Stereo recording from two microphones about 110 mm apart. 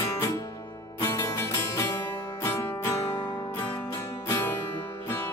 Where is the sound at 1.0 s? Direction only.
25° left (ahead or behind).